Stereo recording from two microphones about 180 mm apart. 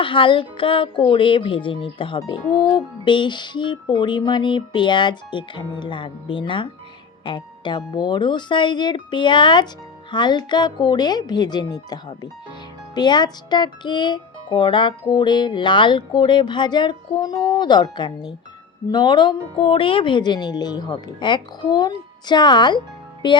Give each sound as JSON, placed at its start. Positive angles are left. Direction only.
{"t": 0.0, "sound": "speech", "side_deg": 30}